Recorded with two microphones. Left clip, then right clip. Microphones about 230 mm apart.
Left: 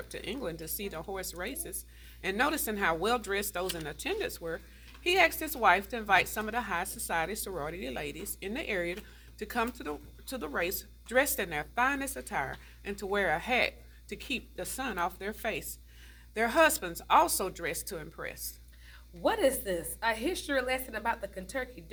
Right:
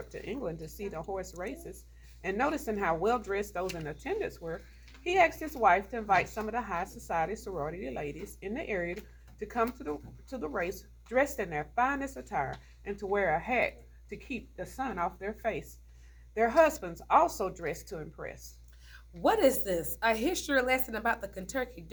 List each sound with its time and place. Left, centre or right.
0.1 s a woman's voice: left
5.0 s speech: left
5.5 s a woman's voice: left
7.3 s speech: left
16.3 s speech: left
19.2 s a woman's voice: right